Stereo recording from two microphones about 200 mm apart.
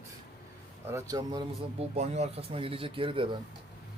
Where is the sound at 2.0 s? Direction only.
35° right (ahead or behind).